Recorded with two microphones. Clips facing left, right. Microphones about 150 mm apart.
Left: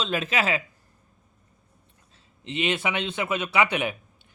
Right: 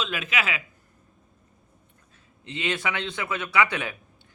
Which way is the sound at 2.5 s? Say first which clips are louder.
Left 2 dB; 20° left (ahead or behind).